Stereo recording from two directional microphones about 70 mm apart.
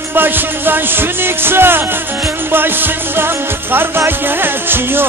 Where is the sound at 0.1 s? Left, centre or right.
Right.